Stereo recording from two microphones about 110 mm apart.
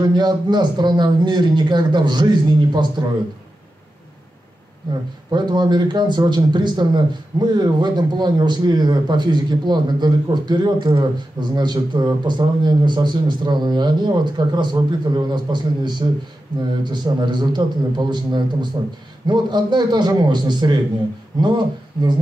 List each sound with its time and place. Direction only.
0.0 s speech: 40° right (ahead or behind)
5.3 s a man's voice: 40° right (ahead or behind)